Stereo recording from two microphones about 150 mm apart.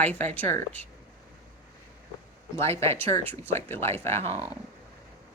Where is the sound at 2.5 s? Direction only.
15° left (ahead or behind).